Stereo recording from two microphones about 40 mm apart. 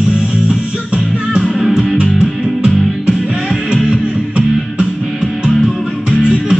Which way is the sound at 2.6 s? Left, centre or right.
Right.